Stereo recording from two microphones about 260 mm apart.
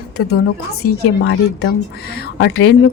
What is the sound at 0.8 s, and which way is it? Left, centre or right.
A woman's voice, left.